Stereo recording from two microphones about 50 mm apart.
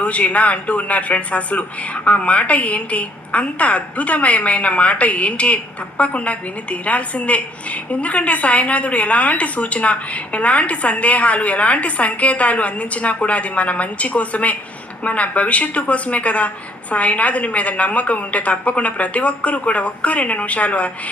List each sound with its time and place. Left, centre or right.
0.0 s a woman's voice: left